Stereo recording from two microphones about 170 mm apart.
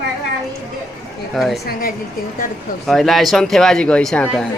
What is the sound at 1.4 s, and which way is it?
Speech, centre (ahead or behind).